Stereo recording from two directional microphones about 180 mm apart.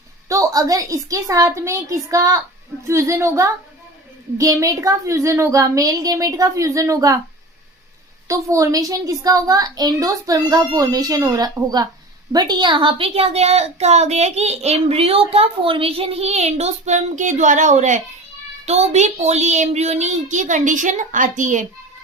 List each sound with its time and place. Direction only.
0.3 s a woman's voice: 15° right (ahead or behind)
8.3 s a child's voice: 15° right (ahead or behind); by 21.7 s 45° right (ahead or behind)